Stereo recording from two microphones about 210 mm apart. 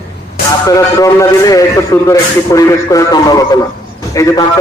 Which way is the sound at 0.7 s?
15° left (ahead or behind).